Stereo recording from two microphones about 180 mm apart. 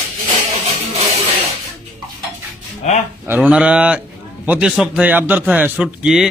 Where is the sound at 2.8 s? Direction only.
40° left (ahead or behind).